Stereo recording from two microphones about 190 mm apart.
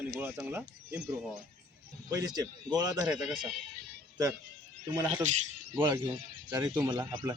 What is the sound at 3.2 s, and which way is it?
Speech, centre (ahead or behind).